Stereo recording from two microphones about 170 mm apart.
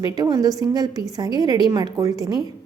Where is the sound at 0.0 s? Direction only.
25° right (ahead or behind).